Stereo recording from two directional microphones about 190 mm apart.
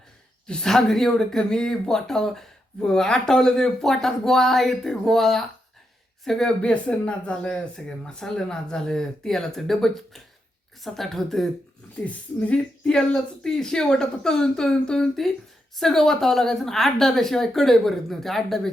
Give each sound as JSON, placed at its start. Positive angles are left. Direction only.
{"t": 0.4, "sound": "speech", "side_deg": 5}